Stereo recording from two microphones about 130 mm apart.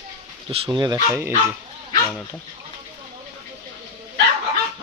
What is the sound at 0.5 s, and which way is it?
Speech, 50° right (ahead or behind).